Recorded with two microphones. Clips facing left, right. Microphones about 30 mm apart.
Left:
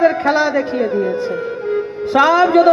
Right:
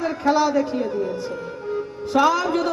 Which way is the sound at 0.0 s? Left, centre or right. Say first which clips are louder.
Left 6 dB; left.